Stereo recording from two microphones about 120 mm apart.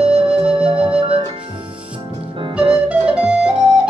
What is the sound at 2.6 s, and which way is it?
Music, 10° right (ahead or behind).